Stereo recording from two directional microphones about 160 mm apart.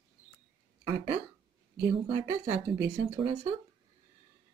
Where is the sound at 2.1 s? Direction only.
30° right (ahead or behind).